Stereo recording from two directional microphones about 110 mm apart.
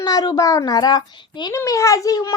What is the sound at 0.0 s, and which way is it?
A child's voice, 35° left (ahead or behind).